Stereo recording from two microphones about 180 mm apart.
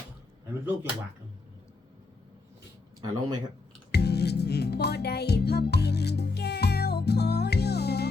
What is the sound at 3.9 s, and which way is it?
Music, 65° left (ahead or behind).